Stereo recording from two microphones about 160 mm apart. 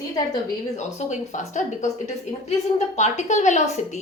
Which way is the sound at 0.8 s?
50° left (ahead or behind).